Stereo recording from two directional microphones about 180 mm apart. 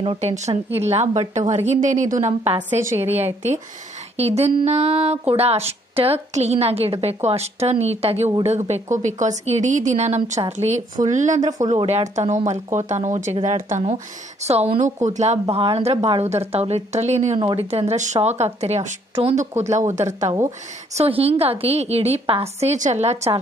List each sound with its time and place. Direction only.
0.0 s speech: 35° right (ahead or behind)
3.0 s speech: 10° right (ahead or behind)
4.2 s speech: 35° right (ahead or behind)
17.4 s speech: 25° right (ahead or behind)
17.6 s speech: 35° right (ahead or behind)
20.9 s speech: 35° right (ahead or behind)